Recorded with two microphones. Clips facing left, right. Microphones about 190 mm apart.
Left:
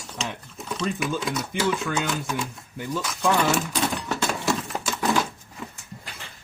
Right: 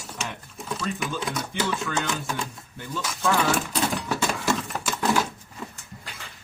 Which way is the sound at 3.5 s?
Centre (ahead or behind).